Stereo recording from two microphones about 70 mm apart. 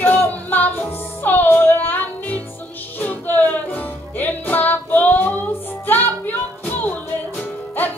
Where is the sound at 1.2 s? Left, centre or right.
Left.